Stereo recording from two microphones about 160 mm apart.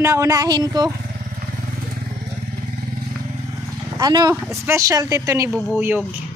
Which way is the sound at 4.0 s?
25° right (ahead or behind).